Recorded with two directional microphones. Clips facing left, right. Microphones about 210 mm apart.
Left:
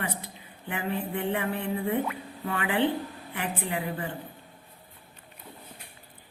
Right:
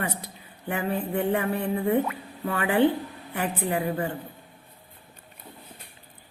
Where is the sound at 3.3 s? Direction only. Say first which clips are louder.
Right 5 dB; 45° right (ahead or behind).